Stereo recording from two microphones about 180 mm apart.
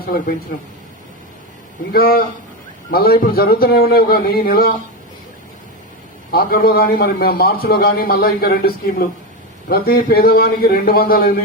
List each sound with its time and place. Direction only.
1.9 s a man's voice: 55° left (ahead or behind)
6.3 s a man's voice: 55° left (ahead or behind)